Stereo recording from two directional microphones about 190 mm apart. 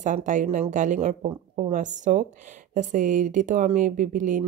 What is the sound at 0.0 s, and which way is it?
Speech, 40° right (ahead or behind).